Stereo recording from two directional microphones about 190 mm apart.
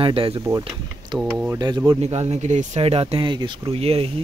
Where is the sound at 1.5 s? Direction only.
20° right (ahead or behind).